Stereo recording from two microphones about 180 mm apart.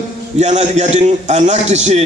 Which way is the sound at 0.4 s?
40° right (ahead or behind).